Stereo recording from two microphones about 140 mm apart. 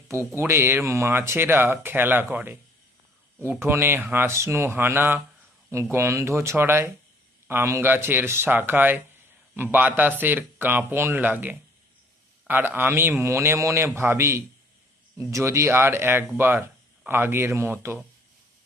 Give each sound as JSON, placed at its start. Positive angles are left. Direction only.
{"t": 0.1, "sound": "speech", "side_deg": -20}